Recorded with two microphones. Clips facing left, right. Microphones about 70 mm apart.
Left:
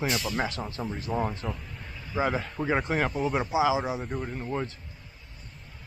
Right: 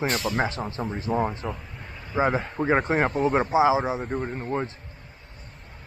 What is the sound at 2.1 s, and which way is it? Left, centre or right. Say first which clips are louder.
Speech: right 4 dB; right.